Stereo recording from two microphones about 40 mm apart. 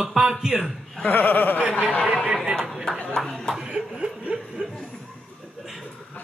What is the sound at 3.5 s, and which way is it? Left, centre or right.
Chuckle, centre.